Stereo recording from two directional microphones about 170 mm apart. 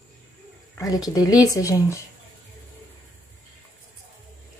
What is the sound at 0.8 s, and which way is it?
Speech, 20° left (ahead or behind).